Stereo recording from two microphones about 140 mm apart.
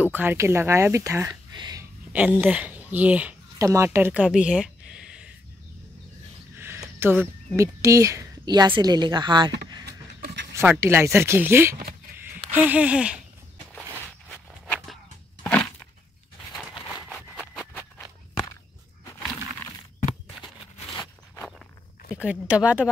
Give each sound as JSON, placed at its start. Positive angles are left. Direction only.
{"t": 0.0, "sound": "speech", "side_deg": -15}
{"t": 2.4, "sound": "speech", "side_deg": -10}
{"t": 3.5, "sound": "speech", "side_deg": -20}
{"t": 6.5, "sound": "speech", "side_deg": -20}
{"t": 10.7, "sound": "speech", "side_deg": -15}
{"t": 14.3, "sound": "walk", "side_deg": 5}
{"t": 15.4, "sound": "a sound", "side_deg": 10}
{"t": 22.1, "sound": "speech", "side_deg": -10}